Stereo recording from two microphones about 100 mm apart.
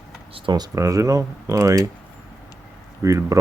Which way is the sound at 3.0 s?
35° right (ahead or behind).